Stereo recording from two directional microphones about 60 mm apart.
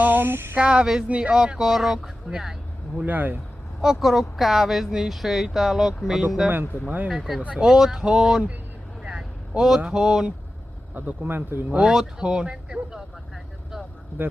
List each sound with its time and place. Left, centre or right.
0.0 s speech: right
0.5 s speech: centre
3.0 s speech: right
3.8 s speech: centre
6.8 s speech: right
7.1 s speech: centre
7.4 s speech: centre
9.0 s vehicle: centre
9.8 s speech: centre
10.9 s speech: right
11.8 s speech: centre
13.3 s vehicle: centre